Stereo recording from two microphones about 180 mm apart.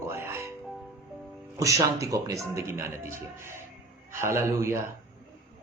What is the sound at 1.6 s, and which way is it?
Speech, 20° right (ahead or behind).